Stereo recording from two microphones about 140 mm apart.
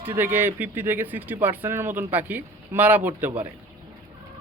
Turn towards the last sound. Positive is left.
turn(degrees=-15)  # may be behind; listen again after turning